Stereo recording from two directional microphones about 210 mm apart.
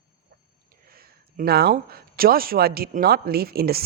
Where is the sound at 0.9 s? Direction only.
45° right (ahead or behind).